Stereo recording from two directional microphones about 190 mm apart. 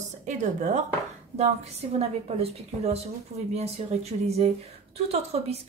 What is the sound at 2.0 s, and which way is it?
Speech, 30° right (ahead or behind).